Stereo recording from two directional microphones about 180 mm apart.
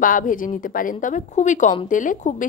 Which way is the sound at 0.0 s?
50° left (ahead or behind).